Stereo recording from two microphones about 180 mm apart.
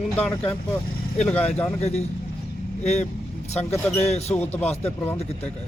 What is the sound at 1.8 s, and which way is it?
Speech, 35° left (ahead or behind).